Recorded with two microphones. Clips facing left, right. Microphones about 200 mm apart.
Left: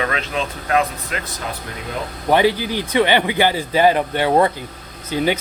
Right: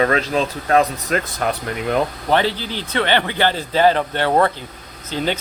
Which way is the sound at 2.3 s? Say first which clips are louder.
Left 8 dB; 15° left (ahead or behind).